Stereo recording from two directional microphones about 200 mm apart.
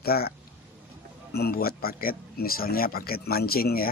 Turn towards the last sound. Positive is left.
turn(degrees=50)  # may be behind; listen again after turning